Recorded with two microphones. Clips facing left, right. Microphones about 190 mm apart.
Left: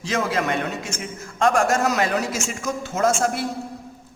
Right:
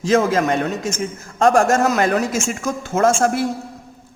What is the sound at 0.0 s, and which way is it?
Speech, 45° right (ahead or behind).